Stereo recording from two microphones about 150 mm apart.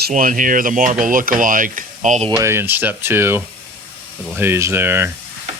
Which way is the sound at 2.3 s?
20° right (ahead or behind).